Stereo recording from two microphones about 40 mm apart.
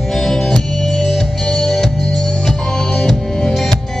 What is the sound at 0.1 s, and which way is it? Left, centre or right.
Music, centre.